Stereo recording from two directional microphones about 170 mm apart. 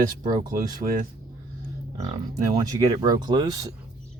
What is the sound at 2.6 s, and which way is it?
Speech, 20° right (ahead or behind).